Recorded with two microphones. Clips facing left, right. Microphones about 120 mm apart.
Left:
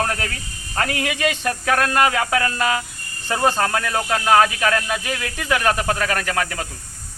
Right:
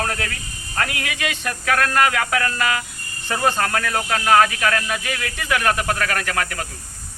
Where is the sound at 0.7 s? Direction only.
25° left (ahead or behind).